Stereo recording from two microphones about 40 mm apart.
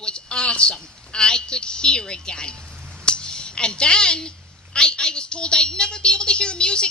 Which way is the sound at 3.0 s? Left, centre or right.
Left.